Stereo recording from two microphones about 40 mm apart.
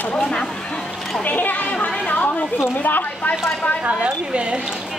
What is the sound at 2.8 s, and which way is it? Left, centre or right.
Speech, left.